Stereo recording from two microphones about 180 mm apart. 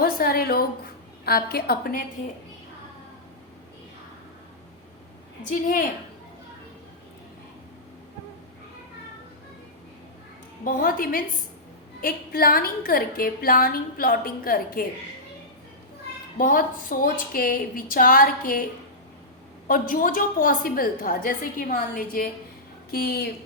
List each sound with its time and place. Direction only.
0.0 s a woman's voice: 55° left (ahead or behind)
5.5 s a woman's voice: 50° left (ahead or behind)
10.6 s a woman's voice: 50° left (ahead or behind)
16.4 s a woman's voice: 50° left (ahead or behind)
19.6 s a woman's voice: 50° left (ahead or behind)